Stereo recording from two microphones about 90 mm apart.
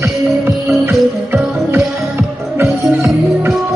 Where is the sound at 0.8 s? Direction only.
25° right (ahead or behind).